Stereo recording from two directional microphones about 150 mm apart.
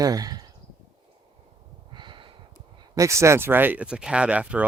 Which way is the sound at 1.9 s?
30° right (ahead or behind).